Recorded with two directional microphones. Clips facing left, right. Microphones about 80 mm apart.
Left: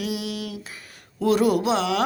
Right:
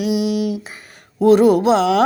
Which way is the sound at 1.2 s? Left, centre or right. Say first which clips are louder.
Right 8 dB; right.